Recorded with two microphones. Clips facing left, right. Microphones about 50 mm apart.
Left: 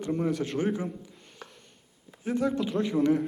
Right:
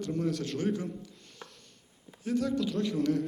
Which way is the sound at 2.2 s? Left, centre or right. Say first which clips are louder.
Left 2 dB; left.